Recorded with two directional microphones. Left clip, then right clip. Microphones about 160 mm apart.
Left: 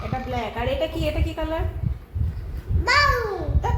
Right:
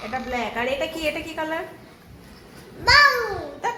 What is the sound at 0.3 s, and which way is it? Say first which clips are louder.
Speech: right 2 dB; 20° right (ahead or behind).